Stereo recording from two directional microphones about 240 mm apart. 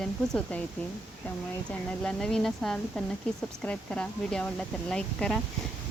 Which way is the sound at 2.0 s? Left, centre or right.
Centre.